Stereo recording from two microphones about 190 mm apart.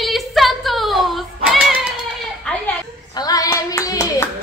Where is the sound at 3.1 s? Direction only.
20° left (ahead or behind).